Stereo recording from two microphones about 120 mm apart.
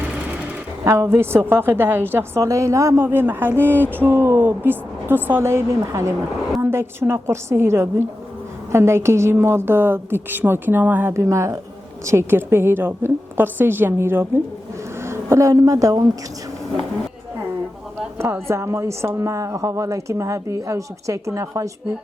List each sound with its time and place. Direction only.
0.9 s a woman's voice: 25° right (ahead or behind)
18.2 s a woman's voice: 20° right (ahead or behind)